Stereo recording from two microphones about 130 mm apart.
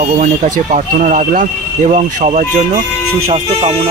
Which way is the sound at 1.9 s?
65° right (ahead or behind).